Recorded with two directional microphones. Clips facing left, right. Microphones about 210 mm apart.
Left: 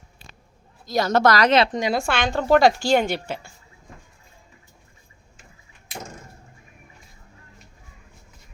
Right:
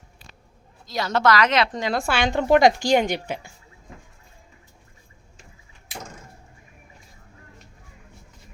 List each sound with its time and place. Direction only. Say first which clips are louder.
0.9 s a woman's voice: left 2 dB; 45° left (ahead or behind)
1.7 s a woman's voice: left 2 dB; 15° left (ahead or behind)
2.0 s a woman's voice: right 1 dB; 5° right (ahead or behind)